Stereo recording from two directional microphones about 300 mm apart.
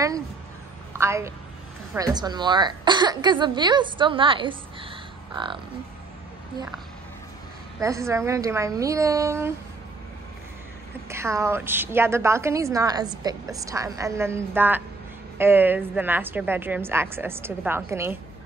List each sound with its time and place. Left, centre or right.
0.9 s a woman's voice: centre
7.8 s a woman's voice: centre
11.1 s a woman's voice: centre